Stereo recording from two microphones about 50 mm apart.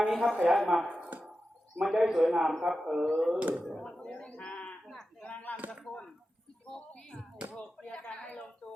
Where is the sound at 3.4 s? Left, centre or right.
Right.